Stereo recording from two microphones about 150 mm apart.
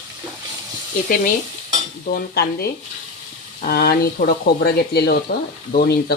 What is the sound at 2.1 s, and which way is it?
Speech, 90° left.